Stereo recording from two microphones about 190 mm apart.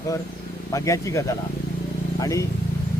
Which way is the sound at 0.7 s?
15° left (ahead or behind).